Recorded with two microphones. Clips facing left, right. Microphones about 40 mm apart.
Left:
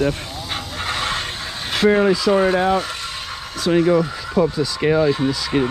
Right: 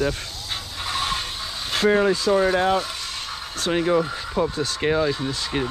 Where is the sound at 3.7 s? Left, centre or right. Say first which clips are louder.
Left 6 dB; left.